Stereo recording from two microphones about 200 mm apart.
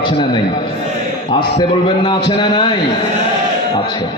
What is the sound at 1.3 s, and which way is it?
A man's voice, 25° left (ahead or behind).